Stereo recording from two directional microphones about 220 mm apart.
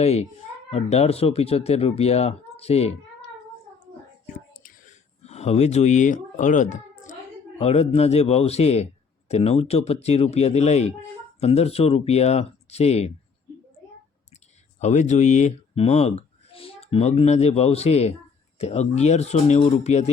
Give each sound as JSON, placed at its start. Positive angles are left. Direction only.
{"t": 0.0, "sound": "speech", "side_deg": 30}
{"t": 4.5, "sound": "a sound", "side_deg": 35}
{"t": 7.6, "sound": "speech", "side_deg": 30}
{"t": 14.8, "sound": "speech", "side_deg": 30}